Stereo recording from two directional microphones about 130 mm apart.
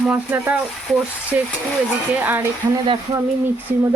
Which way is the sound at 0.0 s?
10° right (ahead or behind).